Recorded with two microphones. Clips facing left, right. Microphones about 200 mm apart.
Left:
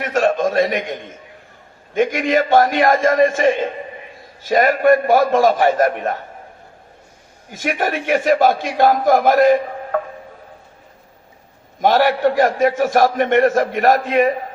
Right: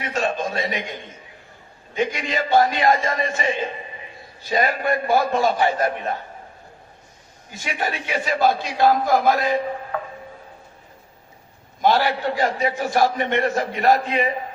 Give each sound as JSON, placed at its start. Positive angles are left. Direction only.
{"t": 0.0, "sound": "a man's voice", "side_deg": 50}
{"t": 7.5, "sound": "a man's voice", "side_deg": 50}
{"t": 11.8, "sound": "a man's voice", "side_deg": 50}